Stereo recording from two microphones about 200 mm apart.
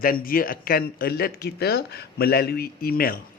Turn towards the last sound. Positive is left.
turn(degrees=50)  # may be behind; listen again after turning